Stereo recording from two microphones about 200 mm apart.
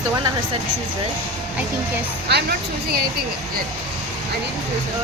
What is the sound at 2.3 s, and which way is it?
Speech, 55° right (ahead or behind).